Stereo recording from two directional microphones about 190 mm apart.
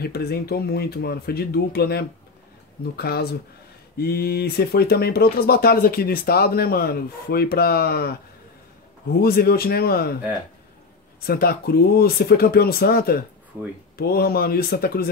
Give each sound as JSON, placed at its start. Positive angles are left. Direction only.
{"t": 0.0, "sound": "speech", "side_deg": 55}
{"t": 9.2, "sound": "speech", "side_deg": 55}
{"t": 11.1, "sound": "speech", "side_deg": 55}